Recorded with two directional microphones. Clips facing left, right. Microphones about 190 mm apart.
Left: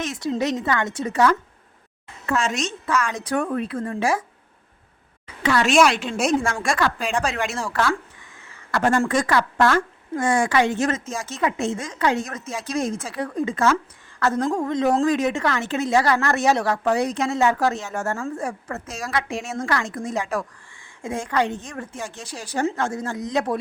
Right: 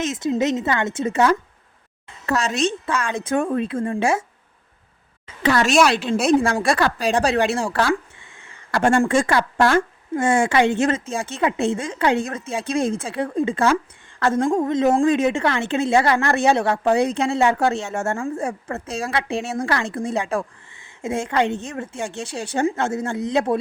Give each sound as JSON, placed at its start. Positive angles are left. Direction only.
{"t": 0.0, "sound": "a woman's voice", "side_deg": -20}
{"t": 2.2, "sound": "a woman's voice", "side_deg": -35}
{"t": 5.4, "sound": "a woman's voice", "side_deg": -40}